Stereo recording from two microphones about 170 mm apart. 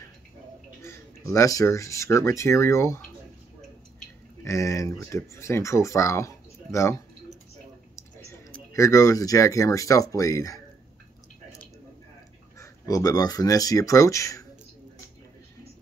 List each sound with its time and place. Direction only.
0.8 s speech: 20° left (ahead or behind)
4.5 s speech: 20° left (ahead or behind)
7.9 s a sound: 15° left (ahead or behind)
8.7 s speech: 20° left (ahead or behind)
12.5 s speech: 20° left (ahead or behind)